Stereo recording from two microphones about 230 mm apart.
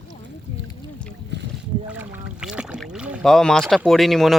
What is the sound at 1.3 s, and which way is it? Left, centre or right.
Boat, right.